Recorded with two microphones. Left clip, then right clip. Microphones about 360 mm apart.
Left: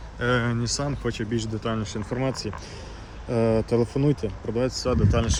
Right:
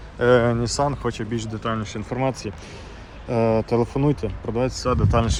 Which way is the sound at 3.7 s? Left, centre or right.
Right.